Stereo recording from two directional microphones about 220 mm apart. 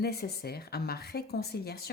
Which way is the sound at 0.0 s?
45° left (ahead or behind).